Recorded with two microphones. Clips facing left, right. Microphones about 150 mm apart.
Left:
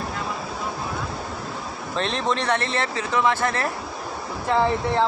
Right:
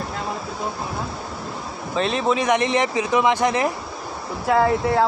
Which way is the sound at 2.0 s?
5° right (ahead or behind).